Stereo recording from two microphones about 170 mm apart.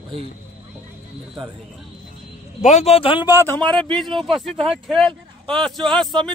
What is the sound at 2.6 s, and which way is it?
Speech, 40° left (ahead or behind).